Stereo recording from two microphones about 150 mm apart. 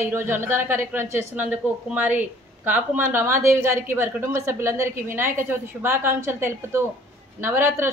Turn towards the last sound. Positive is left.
turn(degrees=-15)  # may be behind; listen again after turning